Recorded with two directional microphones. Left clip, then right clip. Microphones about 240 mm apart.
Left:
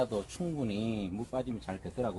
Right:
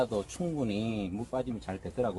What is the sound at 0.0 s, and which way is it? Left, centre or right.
Speech, right.